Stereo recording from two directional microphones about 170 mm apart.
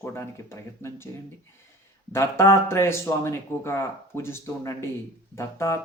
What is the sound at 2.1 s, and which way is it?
Speech, 15° left (ahead or behind).